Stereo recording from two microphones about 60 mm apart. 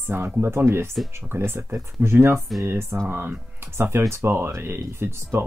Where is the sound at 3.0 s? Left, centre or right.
Right.